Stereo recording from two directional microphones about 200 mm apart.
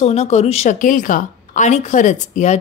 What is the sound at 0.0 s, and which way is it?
A woman's voice, 30° left (ahead or behind).